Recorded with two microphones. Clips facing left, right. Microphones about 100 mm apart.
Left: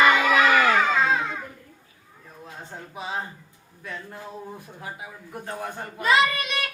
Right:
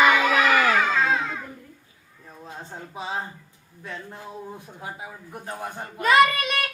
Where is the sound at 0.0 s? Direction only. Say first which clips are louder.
Even; 5° right (ahead or behind).